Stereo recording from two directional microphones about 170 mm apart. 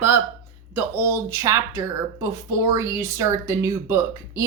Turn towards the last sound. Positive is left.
turn(degrees=-15)  # may be behind; listen again after turning